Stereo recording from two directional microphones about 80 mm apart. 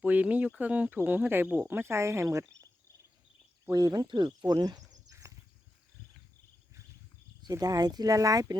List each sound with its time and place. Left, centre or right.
0.0 s speech: centre; by 2.4 s right
3.7 s speech: right
4.4 s speech: right
5.1 s horse: right
7.6 s speech: right